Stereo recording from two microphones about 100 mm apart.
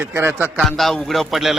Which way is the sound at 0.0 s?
20° right (ahead or behind).